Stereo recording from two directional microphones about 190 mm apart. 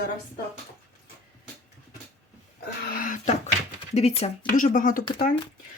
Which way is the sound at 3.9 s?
35° left (ahead or behind).